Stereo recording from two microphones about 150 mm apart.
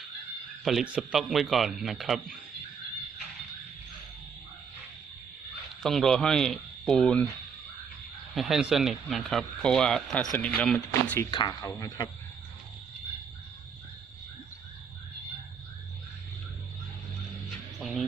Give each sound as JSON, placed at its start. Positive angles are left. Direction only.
{"t": 0.6, "sound": "speech", "side_deg": 0}
{"t": 5.8, "sound": "speech", "side_deg": 0}
{"t": 8.4, "sound": "speech", "side_deg": 0}
{"t": 11.2, "sound": "speech", "side_deg": 30}
{"t": 17.7, "sound": "music", "side_deg": 0}